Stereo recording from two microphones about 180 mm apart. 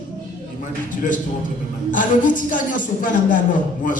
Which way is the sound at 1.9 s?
45° left (ahead or behind).